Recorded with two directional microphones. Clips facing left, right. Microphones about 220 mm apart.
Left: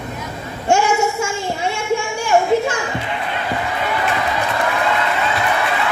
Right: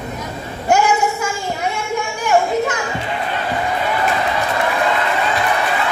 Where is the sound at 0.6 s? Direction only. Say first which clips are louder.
Even; 25° left (ahead or behind).